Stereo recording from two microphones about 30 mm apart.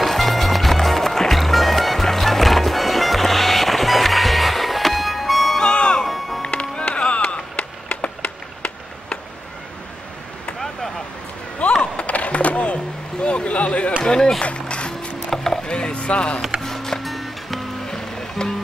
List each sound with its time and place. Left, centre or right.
0.0 s music: centre
5.6 s music: left
6.0 s music: centre
7.2 s a sound: left
11.8 s a sound: left
14.0 s run: left
14.4 s music: left
15.3 s wood: centre
15.6 s music: left
16.6 s music: centre
17.0 s music: centre
17.8 s music: left